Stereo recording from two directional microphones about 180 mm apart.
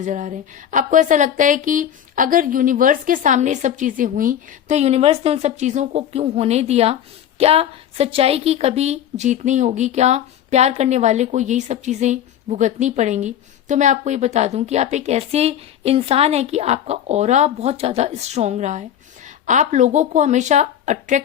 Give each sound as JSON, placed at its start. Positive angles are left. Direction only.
{"t": 0.0, "sound": "a woman's voice", "side_deg": -45}